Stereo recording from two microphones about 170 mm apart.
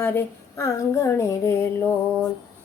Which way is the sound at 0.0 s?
15° left (ahead or behind).